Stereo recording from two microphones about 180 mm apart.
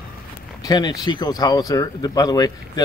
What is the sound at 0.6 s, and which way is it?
Speech, 20° left (ahead or behind).